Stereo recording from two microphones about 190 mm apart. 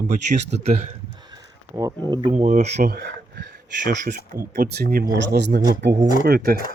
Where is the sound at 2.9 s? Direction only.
60° right (ahead or behind).